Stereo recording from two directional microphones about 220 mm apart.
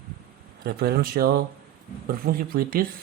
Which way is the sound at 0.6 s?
45° right (ahead or behind).